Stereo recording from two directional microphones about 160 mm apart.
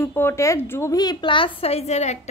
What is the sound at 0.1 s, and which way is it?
Speech, 15° left (ahead or behind).